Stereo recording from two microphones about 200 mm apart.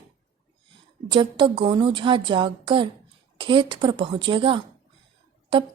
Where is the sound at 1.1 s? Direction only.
25° right (ahead or behind).